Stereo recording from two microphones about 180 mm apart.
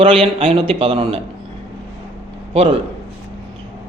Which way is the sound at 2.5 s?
35° right (ahead or behind).